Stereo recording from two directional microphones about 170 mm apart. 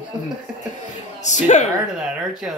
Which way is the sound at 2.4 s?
5° right (ahead or behind).